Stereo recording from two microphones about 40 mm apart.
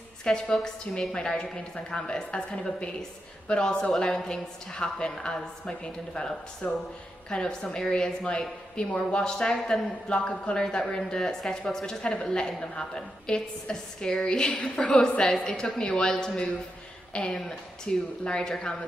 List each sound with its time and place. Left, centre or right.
0.2 s a woman's voice: centre
14.5 s a woman's voice: left
14.9 s a woman's voice: centre
17.4 s a woman's voice: centre